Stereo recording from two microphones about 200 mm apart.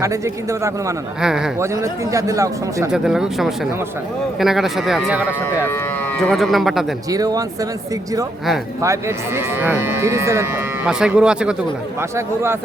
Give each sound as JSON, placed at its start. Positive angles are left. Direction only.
{"t": 1.2, "sound": "speech", "side_deg": -5}
{"t": 1.5, "sound": "speech", "side_deg": -15}
{"t": 2.9, "sound": "speech", "side_deg": -5}
{"t": 5.6, "sound": "speech", "side_deg": 10}
{"t": 7.1, "sound": "speech", "side_deg": -15}
{"t": 8.8, "sound": "speech", "side_deg": -15}